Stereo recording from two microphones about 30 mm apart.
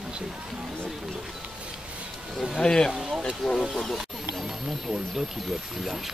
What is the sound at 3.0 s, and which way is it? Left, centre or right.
Speech, right.